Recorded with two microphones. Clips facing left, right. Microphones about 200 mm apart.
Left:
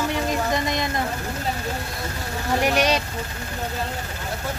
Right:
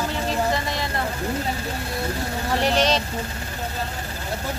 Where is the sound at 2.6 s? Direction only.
10° left (ahead or behind).